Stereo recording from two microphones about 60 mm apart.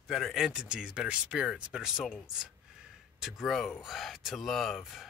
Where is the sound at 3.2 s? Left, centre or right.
Centre.